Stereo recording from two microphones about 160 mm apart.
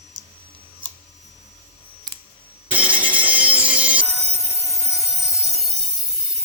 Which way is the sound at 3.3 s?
10° right (ahead or behind).